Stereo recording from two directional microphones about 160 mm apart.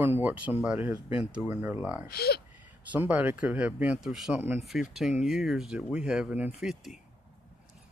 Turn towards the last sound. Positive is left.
turn(degrees=0)  # may be behind; listen again after turning